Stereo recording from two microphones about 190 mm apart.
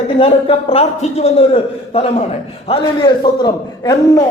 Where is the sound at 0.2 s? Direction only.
30° left (ahead or behind).